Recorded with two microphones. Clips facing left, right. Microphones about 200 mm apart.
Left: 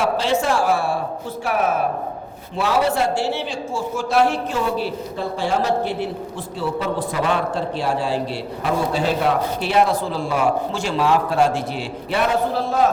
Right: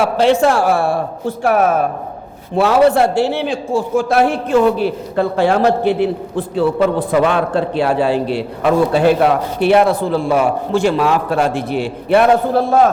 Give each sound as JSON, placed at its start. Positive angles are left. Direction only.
{"t": 0.0, "sound": "a man's voice", "side_deg": -60}